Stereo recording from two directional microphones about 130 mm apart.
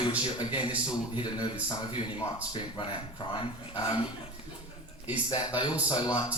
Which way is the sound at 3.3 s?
35° left (ahead or behind).